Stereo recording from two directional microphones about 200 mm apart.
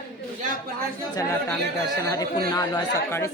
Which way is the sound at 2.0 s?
15° left (ahead or behind).